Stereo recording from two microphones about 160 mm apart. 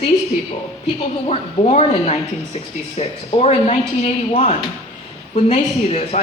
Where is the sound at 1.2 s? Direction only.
45° left (ahead or behind).